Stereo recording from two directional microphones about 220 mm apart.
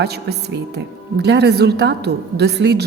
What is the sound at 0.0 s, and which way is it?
A woman's voice, 50° right (ahead or behind).